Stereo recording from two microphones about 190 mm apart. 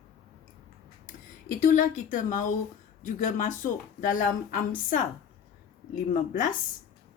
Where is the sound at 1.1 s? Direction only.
45° left (ahead or behind).